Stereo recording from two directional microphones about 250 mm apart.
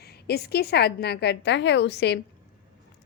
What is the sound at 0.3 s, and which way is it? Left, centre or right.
A woman's voice, left.